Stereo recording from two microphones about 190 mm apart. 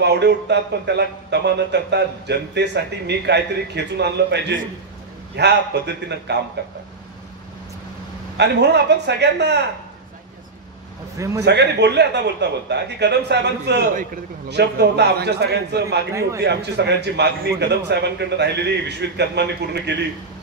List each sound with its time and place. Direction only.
0.0 s speech: 65° right (ahead or behind)
8.4 s speech: 65° right (ahead or behind)
11.1 s a man's voice: 15° right (ahead or behind)
11.4 s speech: 60° right (ahead or behind)